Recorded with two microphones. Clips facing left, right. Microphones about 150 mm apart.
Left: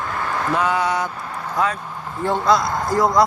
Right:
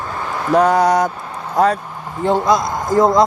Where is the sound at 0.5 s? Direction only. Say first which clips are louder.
Right 9 dB; 40° right (ahead or behind).